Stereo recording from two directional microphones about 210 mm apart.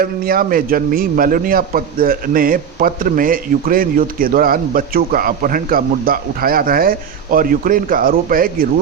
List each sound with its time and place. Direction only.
0.0 s speech: 45° right (ahead or behind)